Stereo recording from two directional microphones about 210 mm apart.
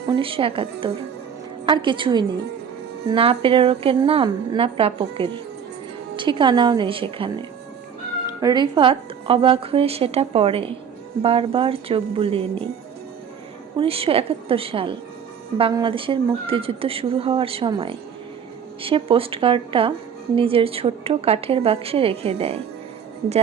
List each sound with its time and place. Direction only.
0.1 s a woman's voice: 25° right (ahead or behind)
8.4 s a woman's voice: 20° right (ahead or behind)
13.7 s a woman's voice: 25° right (ahead or behind)